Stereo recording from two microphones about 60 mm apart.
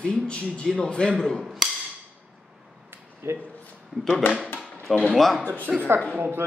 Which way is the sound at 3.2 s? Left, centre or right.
Right.